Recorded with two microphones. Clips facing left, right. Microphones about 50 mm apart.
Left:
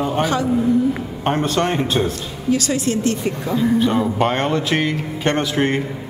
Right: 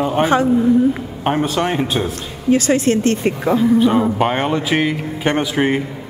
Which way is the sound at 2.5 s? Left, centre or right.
Right.